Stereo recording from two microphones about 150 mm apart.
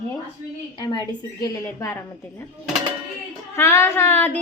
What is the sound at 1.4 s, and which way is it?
Speech, 20° left (ahead or behind).